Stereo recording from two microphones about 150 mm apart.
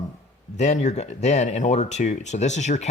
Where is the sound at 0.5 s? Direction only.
50° left (ahead or behind).